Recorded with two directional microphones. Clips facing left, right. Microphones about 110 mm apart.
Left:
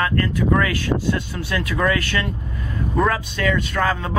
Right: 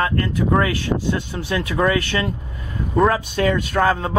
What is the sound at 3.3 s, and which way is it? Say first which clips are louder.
Speech: right 3 dB; 40° right (ahead or behind).